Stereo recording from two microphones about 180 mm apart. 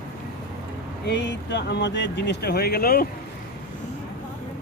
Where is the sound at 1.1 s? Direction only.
75° left (ahead or behind); by 3.0 s 55° left (ahead or behind).